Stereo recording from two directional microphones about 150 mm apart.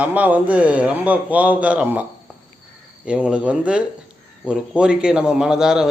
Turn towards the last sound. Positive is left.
turn(degrees=-5)  # may be behind; listen again after turning